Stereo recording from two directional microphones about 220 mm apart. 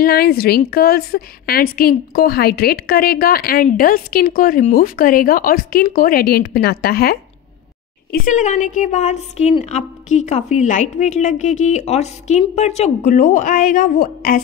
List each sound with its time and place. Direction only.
0.0 s a woman's voice: 45° left (ahead or behind)
8.3 s a woman's voice: 35° left (ahead or behind)